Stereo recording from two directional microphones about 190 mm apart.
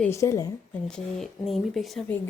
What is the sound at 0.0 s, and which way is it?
Speech, 15° left (ahead or behind).